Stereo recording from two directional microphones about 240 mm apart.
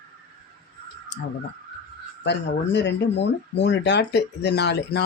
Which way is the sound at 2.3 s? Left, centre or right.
Left.